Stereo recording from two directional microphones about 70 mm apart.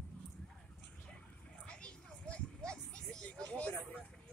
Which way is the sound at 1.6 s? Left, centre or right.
Centre.